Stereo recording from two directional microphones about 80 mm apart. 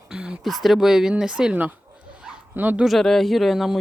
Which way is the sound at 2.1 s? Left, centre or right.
Centre.